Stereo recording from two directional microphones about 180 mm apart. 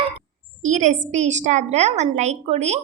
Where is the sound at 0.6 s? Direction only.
40° right (ahead or behind).